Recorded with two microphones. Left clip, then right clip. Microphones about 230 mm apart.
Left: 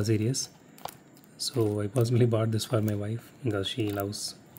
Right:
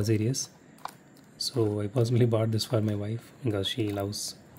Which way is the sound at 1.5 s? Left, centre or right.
Centre.